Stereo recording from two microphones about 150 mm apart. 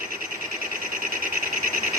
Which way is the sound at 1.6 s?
65° right (ahead or behind).